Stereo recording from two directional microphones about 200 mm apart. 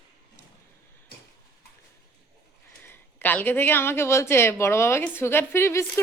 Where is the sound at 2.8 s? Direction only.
10° left (ahead or behind).